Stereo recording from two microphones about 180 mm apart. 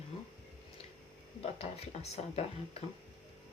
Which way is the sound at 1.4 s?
35° left (ahead or behind).